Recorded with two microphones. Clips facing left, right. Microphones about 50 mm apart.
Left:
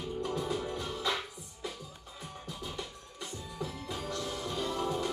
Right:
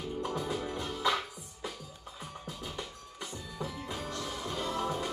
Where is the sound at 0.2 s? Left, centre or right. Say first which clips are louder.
Left 1 dB; right.